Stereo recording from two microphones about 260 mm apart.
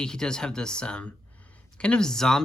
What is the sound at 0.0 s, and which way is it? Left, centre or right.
Speech, centre.